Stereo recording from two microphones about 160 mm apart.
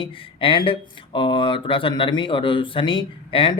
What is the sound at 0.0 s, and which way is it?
Speech, 35° left (ahead or behind).